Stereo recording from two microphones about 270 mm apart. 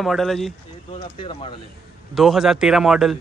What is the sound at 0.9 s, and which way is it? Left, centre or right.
Speech, left.